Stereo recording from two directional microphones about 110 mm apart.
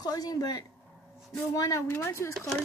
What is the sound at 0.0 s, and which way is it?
A woman's voice, 35° left (ahead or behind).